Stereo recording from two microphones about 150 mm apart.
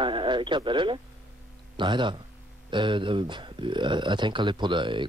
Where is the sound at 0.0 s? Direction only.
35° right (ahead or behind).